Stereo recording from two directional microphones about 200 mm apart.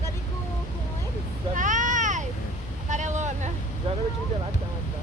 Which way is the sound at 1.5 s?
40° right (ahead or behind).